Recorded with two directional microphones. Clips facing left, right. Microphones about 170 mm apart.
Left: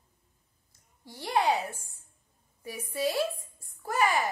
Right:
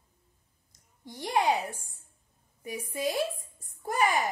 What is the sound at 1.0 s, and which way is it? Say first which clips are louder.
A woman's voice: even; 15° right (ahead or behind).